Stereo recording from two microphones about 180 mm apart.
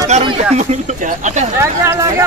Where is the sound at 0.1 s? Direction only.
40° right (ahead or behind).